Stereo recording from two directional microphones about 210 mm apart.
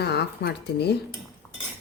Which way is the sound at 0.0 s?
50° left (ahead or behind).